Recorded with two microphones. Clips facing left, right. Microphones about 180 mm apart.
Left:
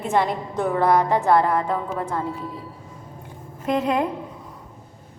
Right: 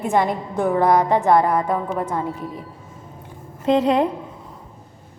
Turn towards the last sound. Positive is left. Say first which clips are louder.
# right 5 dB
turn(degrees=-30)  # may be behind; listen again after turning